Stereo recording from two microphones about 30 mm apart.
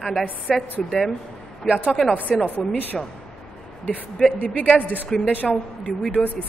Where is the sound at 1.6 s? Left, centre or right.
Right.